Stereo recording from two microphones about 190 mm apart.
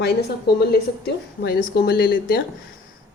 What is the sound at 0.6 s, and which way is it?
Speech, 55° left (ahead or behind).